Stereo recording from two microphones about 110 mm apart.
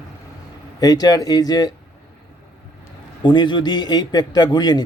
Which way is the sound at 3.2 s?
40° left (ahead or behind).